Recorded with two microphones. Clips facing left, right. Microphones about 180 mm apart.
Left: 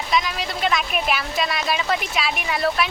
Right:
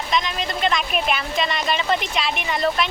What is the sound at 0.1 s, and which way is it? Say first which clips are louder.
A woman's voice: even; 5° left (ahead or behind).